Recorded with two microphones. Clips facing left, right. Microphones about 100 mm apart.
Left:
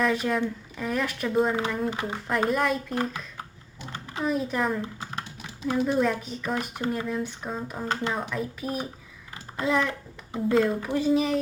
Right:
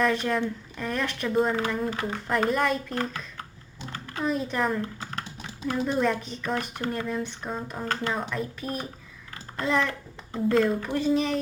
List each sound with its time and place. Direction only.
0.0 s speech: 5° left (ahead or behind)
1.9 s speech: 15° left (ahead or behind)
2.2 s speech: centre (ahead or behind)
3.9 s a sound: 20° left (ahead or behind)
4.2 s speech: 5° left (ahead or behind)
4.8 s typing: 15° left (ahead or behind)
5.8 s speech: centre (ahead or behind)